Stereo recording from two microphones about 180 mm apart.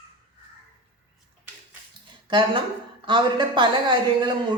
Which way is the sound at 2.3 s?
25° right (ahead or behind).